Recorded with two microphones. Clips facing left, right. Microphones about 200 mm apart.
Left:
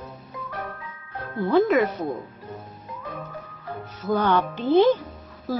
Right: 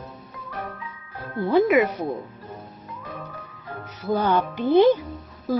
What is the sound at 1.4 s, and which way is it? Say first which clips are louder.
Speech: even; 15° right (ahead or behind).